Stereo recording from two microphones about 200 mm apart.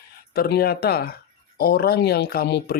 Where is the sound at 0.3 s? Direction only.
50° left (ahead or behind).